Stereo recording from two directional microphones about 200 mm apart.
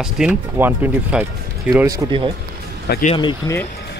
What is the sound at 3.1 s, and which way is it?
Speech, 20° left (ahead or behind).